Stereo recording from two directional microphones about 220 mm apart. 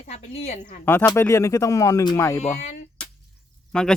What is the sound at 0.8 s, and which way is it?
Speech, 15° left (ahead or behind).